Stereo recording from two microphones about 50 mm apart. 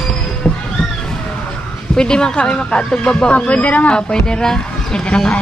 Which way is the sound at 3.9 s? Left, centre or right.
Centre.